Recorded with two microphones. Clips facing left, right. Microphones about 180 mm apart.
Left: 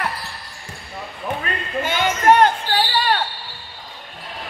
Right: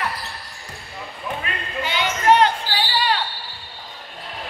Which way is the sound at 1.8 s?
50° left (ahead or behind).